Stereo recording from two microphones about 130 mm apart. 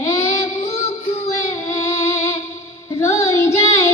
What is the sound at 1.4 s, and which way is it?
Music, 20° left (ahead or behind).